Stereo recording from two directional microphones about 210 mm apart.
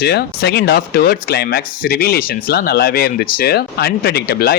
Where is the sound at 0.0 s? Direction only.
50° left (ahead or behind).